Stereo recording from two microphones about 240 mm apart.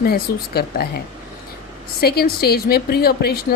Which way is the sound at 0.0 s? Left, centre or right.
Left.